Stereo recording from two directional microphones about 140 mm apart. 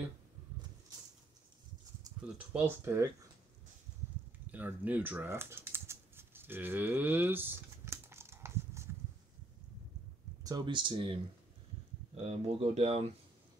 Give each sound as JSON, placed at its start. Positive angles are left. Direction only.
{"t": 2.2, "sound": "speech", "side_deg": -10}
{"t": 2.8, "sound": "speech", "side_deg": -20}
{"t": 4.5, "sound": "typing", "side_deg": -10}
{"t": 10.4, "sound": "speech", "side_deg": -30}
{"t": 12.3, "sound": "speech", "side_deg": -50}